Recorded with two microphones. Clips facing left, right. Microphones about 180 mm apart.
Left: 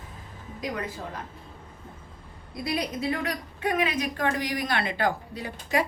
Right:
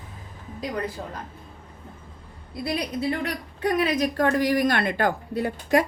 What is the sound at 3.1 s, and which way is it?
Speech, 35° right (ahead or behind).